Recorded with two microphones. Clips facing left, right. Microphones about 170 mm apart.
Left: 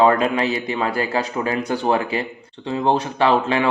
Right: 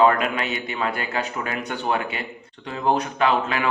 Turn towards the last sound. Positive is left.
turn(degrees=30)  # may be behind; listen again after turning